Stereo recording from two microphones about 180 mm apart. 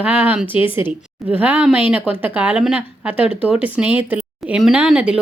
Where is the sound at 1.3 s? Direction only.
10° right (ahead or behind).